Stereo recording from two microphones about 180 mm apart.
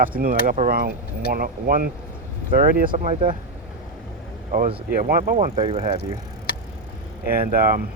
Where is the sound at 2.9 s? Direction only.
40° right (ahead or behind).